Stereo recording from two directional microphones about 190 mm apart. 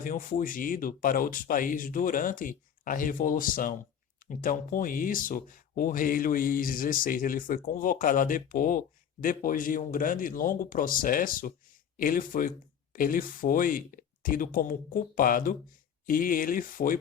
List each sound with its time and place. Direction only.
0.0 s speech: 45° left (ahead or behind)